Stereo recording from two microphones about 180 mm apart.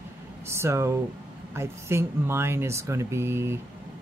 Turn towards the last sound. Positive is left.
turn(degrees=-15)  # may be behind; listen again after turning